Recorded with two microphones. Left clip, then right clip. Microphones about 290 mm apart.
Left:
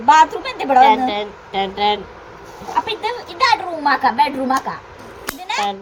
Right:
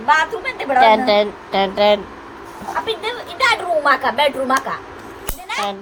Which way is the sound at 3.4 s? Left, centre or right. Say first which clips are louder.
Right 1 dB; right.